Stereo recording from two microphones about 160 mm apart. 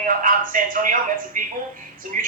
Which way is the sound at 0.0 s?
55° right (ahead or behind).